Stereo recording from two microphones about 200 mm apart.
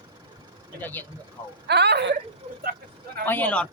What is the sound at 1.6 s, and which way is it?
Speech, 55° right (ahead or behind).